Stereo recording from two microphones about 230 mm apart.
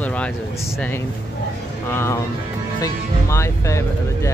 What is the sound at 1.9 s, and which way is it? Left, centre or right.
Speech, centre.